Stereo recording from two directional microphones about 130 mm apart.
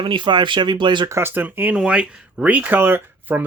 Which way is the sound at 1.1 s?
20° right (ahead or behind).